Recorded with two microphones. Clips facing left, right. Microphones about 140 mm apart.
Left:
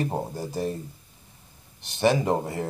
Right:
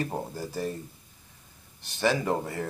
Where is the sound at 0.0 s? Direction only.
25° left (ahead or behind).